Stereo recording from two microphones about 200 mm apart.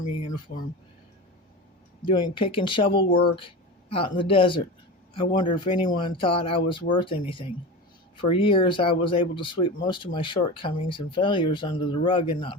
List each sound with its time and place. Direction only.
0.5 s speech: 50° left (ahead or behind)
2.0 s speech: 25° left (ahead or behind)